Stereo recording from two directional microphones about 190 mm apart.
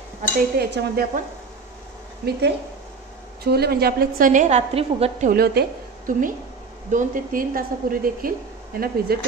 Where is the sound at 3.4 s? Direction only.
55° right (ahead or behind); by 5.3 s 35° right (ahead or behind).